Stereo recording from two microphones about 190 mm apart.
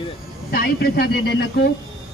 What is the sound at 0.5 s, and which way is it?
Speech, 55° left (ahead or behind).